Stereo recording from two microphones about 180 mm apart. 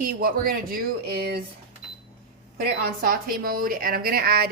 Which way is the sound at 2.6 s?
55° right (ahead or behind).